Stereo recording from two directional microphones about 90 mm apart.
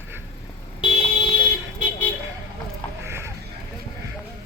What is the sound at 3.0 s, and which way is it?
Music, 30° right (ahead or behind).